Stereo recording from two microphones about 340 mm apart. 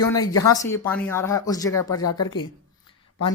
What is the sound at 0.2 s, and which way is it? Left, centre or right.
Speech, centre.